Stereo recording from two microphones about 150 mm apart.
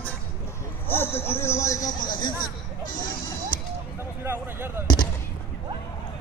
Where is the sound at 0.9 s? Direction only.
15° left (ahead or behind).